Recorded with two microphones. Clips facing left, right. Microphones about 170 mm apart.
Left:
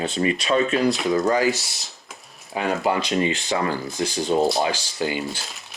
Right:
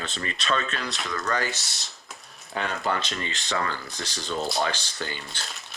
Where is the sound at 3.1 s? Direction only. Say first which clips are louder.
Left 9 dB; 20° left (ahead or behind).